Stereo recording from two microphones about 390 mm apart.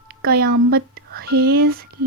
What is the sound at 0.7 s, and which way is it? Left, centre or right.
Speech, right.